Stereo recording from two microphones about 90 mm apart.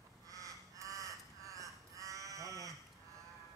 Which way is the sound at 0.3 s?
40° right (ahead or behind).